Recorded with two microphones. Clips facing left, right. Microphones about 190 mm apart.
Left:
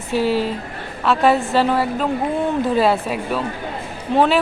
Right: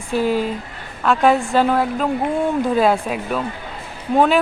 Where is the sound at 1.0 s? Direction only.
Centre (ahead or behind).